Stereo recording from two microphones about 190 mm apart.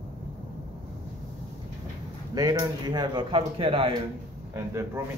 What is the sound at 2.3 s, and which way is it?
Speech, 20° right (ahead or behind).